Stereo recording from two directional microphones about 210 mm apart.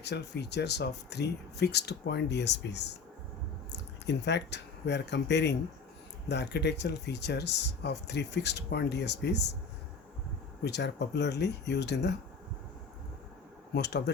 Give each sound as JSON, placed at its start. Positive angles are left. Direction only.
{"t": 0.0, "sound": "speech", "side_deg": 55}
{"t": 10.6, "sound": "speech", "side_deg": 55}
{"t": 13.7, "sound": "speech", "side_deg": 55}